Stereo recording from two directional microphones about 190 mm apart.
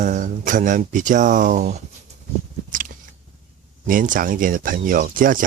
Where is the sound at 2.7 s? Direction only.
45° right (ahead or behind).